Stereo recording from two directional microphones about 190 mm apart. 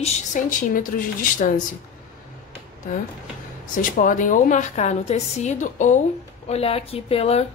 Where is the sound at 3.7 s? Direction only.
45° left (ahead or behind).